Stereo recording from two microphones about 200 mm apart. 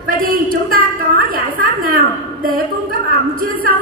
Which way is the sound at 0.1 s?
45° right (ahead or behind).